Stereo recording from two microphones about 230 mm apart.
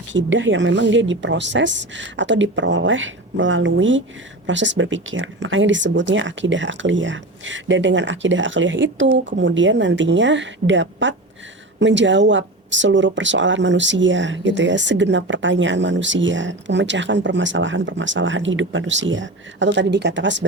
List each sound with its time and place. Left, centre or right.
0.1 s speech: right